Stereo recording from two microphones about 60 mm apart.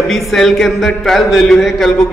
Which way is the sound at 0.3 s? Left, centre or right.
Centre.